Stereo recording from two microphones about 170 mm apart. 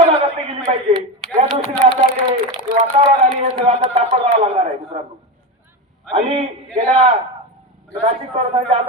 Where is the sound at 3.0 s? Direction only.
40° right (ahead or behind).